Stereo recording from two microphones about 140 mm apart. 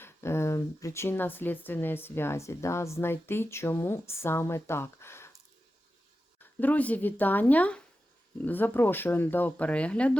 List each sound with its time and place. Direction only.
0.0 s speech: 20° left (ahead or behind)
6.4 s speech: 15° left (ahead or behind)